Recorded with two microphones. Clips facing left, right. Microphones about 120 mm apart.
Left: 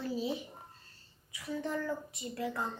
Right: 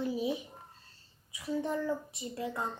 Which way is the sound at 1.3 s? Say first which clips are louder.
Right 3 dB; 25° right (ahead or behind).